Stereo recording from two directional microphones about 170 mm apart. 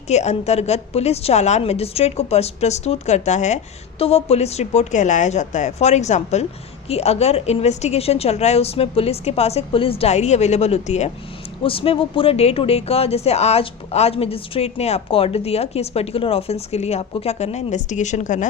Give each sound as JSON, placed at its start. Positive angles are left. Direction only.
{"t": 0.1, "sound": "speech", "side_deg": 40}